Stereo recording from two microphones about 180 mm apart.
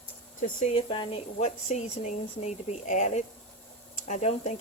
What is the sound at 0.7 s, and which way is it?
Speech, 30° left (ahead or behind).